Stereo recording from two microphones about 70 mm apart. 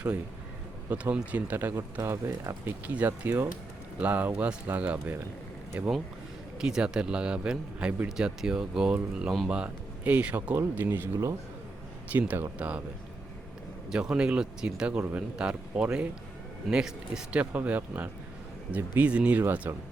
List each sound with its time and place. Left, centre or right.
0.9 s speech: centre
1.7 s speech: right
2.8 s speech: right
4.0 s speech: right
6.6 s speech: centre; by 11.1 s right
12.3 s speech: right
13.9 s speech: centre
17.4 s speech: right
19.6 s speech: right